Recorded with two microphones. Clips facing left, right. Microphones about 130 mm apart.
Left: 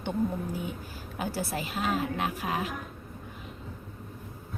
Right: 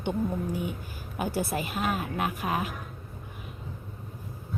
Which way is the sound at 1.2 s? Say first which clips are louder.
Right 3 dB; 15° right (ahead or behind).